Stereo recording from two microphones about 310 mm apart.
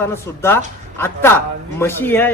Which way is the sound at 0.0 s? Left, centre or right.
Centre.